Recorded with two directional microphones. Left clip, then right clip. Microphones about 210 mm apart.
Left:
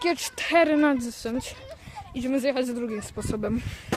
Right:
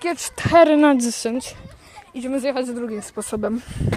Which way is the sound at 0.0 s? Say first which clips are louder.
Right 1 dB; 20° right (ahead or behind).